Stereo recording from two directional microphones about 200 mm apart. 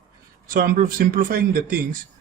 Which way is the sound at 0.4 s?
45° right (ahead or behind).